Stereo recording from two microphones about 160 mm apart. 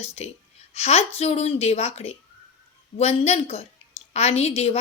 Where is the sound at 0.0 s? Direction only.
40° left (ahead or behind).